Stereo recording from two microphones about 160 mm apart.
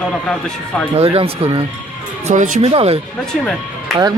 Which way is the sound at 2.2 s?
50° right (ahead or behind).